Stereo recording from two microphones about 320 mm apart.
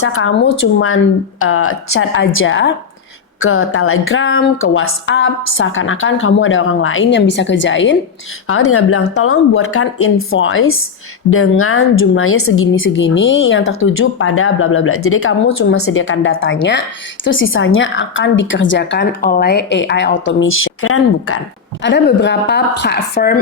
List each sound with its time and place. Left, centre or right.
0.0 s a woman's voice: left